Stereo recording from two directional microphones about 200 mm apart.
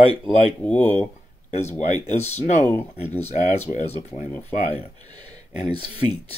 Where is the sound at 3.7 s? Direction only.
35° left (ahead or behind).